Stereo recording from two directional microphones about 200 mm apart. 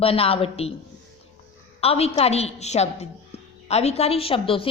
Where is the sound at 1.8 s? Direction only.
30° left (ahead or behind).